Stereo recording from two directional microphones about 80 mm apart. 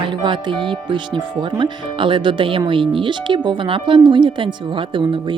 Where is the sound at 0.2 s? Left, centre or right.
Right.